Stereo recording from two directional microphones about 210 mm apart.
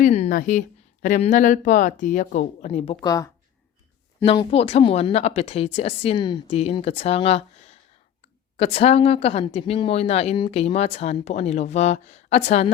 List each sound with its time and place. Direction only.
0.0 s a sound: 30° left (ahead or behind)
0.3 s speech: 40° left (ahead or behind); by 3.2 s 20° left (ahead or behind)
4.3 s speech: 30° left (ahead or behind)